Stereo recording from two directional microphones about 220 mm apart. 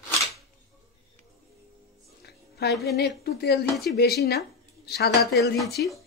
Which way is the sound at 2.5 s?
50° left (ahead or behind).